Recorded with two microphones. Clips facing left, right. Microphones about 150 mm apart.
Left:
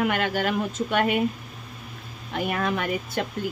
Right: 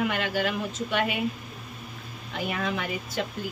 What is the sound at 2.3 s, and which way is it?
Speech, 55° left (ahead or behind).